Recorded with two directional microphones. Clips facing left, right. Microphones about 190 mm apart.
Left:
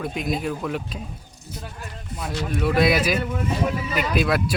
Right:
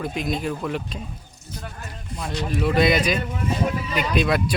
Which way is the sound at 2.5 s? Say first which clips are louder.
Even; centre (ahead or behind).